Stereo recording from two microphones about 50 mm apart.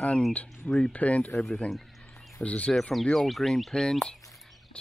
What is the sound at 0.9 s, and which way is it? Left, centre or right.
Speech, left.